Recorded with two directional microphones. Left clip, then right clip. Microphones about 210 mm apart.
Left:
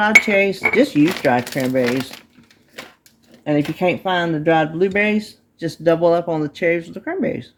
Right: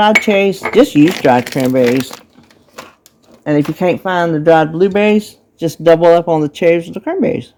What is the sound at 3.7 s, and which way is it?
Speech, 35° right (ahead or behind).